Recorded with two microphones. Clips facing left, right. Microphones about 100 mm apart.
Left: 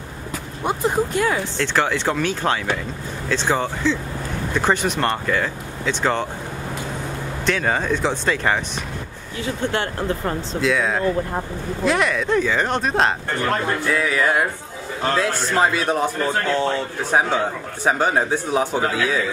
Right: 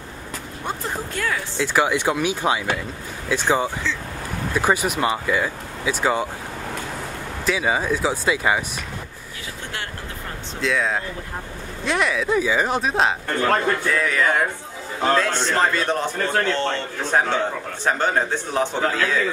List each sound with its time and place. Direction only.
0.7 s speech: 20° left (ahead or behind)
1.6 s speech: 10° right (ahead or behind)
7.4 s speech: 5° right (ahead or behind)
10.6 s a man's voice: centre (ahead or behind)